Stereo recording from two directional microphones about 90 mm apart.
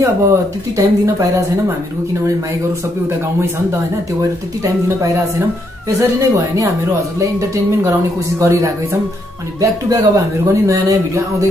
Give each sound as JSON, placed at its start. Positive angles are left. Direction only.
{"t": 0.0, "sound": "speech", "side_deg": -30}
{"t": 4.8, "sound": "speech", "side_deg": -30}